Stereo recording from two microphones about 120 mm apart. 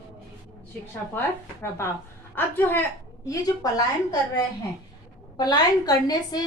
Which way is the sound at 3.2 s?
30° left (ahead or behind).